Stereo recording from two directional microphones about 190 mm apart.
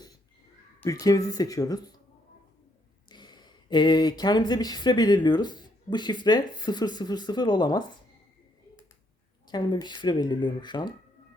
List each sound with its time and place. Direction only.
0.8 s speech: 20° left (ahead or behind)
3.1 s speech: 25° left (ahead or behind)
9.5 s speech: 20° left (ahead or behind)